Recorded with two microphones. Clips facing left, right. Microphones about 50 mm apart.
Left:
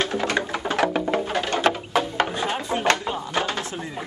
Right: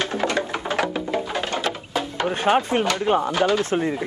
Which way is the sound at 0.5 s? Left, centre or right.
Right.